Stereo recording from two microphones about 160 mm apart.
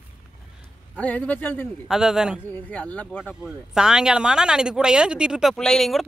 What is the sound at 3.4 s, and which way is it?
Speech, 5° right (ahead or behind).